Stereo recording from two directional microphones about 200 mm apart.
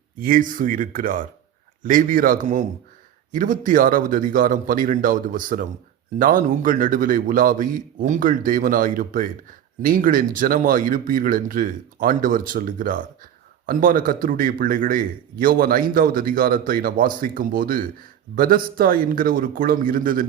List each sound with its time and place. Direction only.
0.2 s a man's voice: 40° right (ahead or behind)